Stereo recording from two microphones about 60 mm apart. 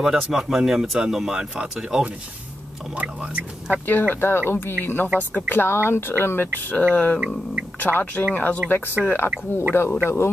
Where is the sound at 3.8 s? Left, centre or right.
Left.